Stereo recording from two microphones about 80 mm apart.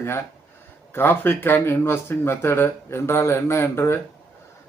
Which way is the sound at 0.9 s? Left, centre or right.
Left.